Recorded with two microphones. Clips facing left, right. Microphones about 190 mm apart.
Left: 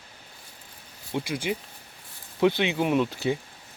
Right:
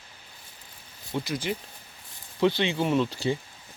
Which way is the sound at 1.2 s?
15° left (ahead or behind).